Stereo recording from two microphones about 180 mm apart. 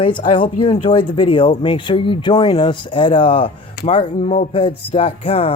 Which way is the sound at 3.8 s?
60° left (ahead or behind).